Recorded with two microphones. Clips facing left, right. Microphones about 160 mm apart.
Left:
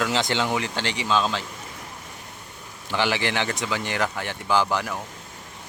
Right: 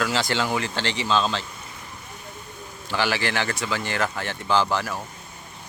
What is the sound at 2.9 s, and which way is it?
Speech, 20° left (ahead or behind).